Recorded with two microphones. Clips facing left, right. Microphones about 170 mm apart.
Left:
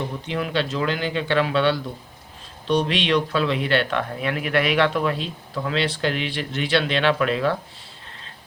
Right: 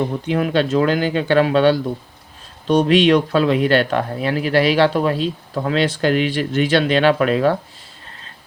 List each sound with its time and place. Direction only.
0.3 s speech: 50° right (ahead or behind)